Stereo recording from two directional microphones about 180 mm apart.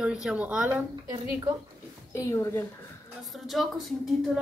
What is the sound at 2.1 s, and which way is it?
Speech, 15° left (ahead or behind).